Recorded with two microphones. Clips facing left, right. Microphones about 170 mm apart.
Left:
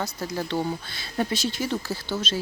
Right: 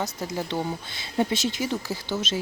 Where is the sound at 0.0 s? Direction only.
20° right (ahead or behind).